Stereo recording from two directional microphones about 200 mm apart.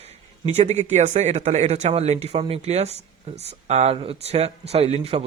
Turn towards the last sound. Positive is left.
turn(degrees=-30)  # may be behind; listen again after turning